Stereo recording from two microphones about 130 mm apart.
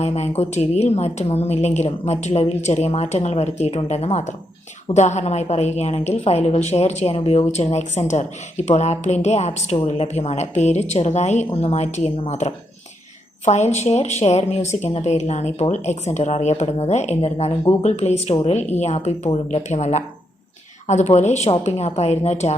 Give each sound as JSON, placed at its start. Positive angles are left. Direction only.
{"t": 0.0, "sound": "a woman's voice", "side_deg": 55}